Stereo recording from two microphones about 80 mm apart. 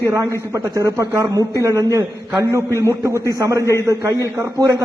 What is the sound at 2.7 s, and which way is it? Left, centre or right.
Speech, left.